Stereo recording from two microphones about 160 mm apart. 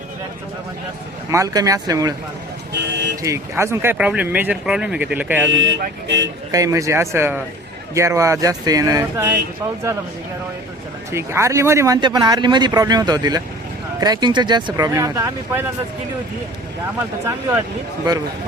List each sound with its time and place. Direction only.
1.3 s speech: 20° right (ahead or behind)
2.7 s vehicle: 90° right
3.2 s speech: 15° right (ahead or behind)
5.5 s speech: 90° right
6.5 s speech: 20° right (ahead or behind)
11.1 s speech: 15° right (ahead or behind)
11.9 s speech: 30° right (ahead or behind)